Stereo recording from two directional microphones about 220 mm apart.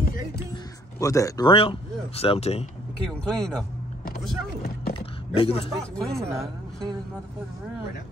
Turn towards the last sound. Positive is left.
turn(degrees=-15)  # may be behind; listen again after turning